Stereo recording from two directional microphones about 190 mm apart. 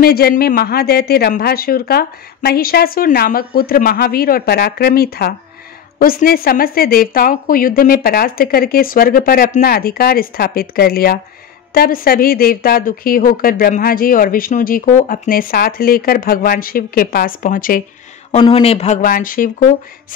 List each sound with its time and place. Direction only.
0.0 s a woman's voice: 55° left (ahead or behind)
18.3 s speech: 30° left (ahead or behind); by 19.7 s 45° left (ahead or behind)